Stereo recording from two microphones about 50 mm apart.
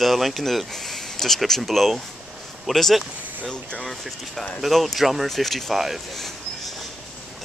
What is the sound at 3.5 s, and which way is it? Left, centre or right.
Speech, centre.